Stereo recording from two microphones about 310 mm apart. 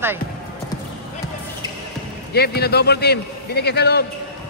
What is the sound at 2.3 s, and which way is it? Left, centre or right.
A man's voice, left.